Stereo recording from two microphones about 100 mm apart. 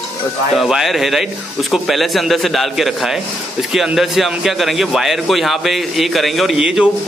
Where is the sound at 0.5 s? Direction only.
Centre (ahead or behind).